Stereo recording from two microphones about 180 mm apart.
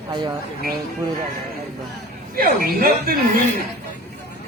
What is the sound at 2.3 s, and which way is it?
Speech, 55° right (ahead or behind).